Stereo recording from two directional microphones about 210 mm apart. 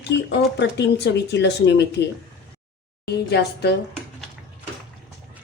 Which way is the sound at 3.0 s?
50° left (ahead or behind).